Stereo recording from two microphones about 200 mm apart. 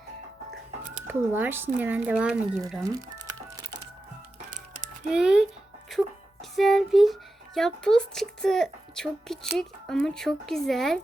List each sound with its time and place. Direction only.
1.0 s speech: 10° right (ahead or behind)
4.5 s music: 40° right (ahead or behind)
5.0 s speech: 5° right (ahead or behind)